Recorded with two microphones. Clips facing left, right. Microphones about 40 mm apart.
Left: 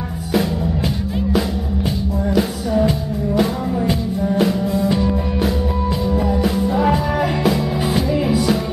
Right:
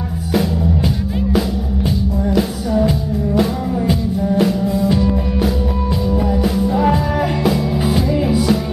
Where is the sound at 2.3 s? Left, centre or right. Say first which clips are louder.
Even; centre.